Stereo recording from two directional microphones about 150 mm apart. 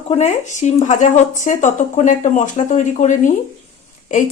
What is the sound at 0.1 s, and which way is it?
A woman's voice, 50° left (ahead or behind).